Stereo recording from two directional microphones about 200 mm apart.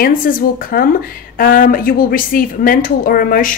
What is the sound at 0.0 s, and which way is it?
Speech, 45° left (ahead or behind).